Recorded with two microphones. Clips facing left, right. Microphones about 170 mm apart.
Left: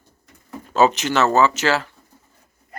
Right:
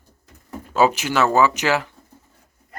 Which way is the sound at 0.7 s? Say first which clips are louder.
Left 1 dB; 10° right (ahead or behind).